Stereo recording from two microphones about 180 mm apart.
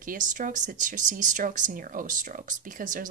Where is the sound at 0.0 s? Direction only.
50° right (ahead or behind).